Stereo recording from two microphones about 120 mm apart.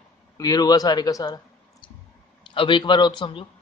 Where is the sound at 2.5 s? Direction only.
45° left (ahead or behind).